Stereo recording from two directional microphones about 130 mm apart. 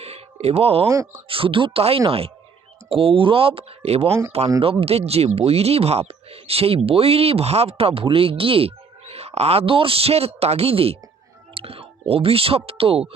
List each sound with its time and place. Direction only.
0.0 s a sound: 55° right (ahead or behind)
0.9 s a man's voice: 20° right (ahead or behind)
1.3 s speech: 45° right (ahead or behind)